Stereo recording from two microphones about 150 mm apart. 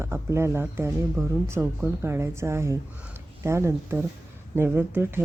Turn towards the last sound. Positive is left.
turn(degrees=-15)  # may be behind; listen again after turning